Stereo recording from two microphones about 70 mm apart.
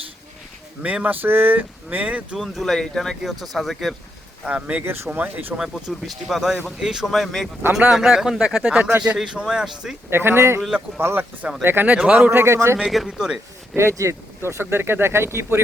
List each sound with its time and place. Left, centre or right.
0.8 s speech: centre
2.4 s speech: centre
4.4 s speech: centre
5.5 s speech: centre
7.8 s speech: centre
10.1 s speech: right
10.6 s speech: centre
10.9 s speech: right
11.9 s speech: centre
12.3 s speech: right
12.8 s speech: centre
13.7 s speech: right